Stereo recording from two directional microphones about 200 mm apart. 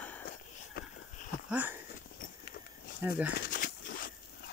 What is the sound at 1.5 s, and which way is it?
Speech, 10° right (ahead or behind).